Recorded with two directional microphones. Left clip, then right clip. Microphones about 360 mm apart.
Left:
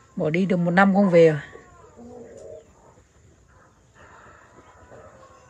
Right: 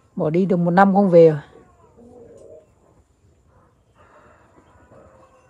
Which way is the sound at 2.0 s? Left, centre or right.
Left.